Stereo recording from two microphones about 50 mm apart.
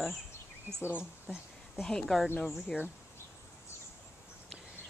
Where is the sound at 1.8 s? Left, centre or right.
Centre.